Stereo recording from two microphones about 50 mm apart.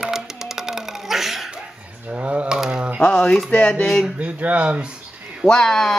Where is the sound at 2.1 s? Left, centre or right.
Right.